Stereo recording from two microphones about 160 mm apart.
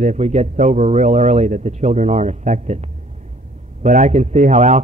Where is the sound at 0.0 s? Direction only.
45° right (ahead or behind).